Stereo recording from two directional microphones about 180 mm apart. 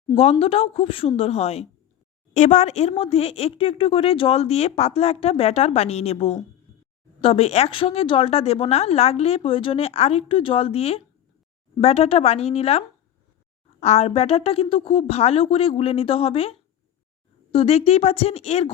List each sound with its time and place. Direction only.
0.1 s speech: 35° left (ahead or behind)